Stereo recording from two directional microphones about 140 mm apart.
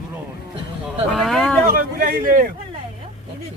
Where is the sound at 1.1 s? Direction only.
Centre (ahead or behind).